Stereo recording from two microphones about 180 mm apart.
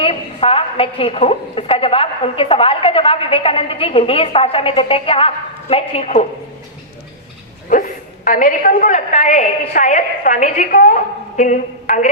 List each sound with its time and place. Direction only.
0.0 s a woman's voice: 30° left (ahead or behind)
7.7 s a woman's voice: 50° left (ahead or behind)